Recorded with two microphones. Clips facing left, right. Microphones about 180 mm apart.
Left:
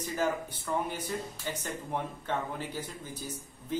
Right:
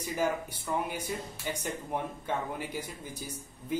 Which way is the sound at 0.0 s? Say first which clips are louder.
Even; 10° right (ahead or behind).